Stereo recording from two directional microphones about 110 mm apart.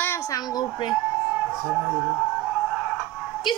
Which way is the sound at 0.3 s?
35° left (ahead or behind).